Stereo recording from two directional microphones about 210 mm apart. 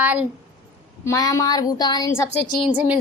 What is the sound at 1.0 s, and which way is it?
Speech, 15° left (ahead or behind).